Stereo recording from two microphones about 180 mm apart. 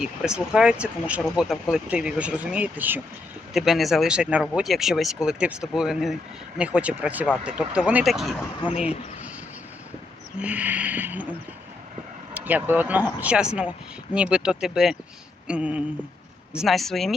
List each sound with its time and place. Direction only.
0.0 s speech: 5° right (ahead or behind)
8.7 s speech: 35° left (ahead or behind)
10.4 s speech: 10° right (ahead or behind)